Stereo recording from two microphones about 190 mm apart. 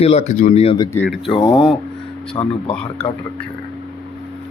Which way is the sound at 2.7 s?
5° left (ahead or behind).